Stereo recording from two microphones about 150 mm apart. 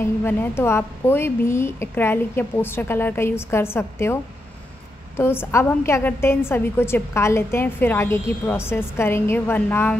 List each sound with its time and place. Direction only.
0.0 s a woman's voice: 10° left (ahead or behind)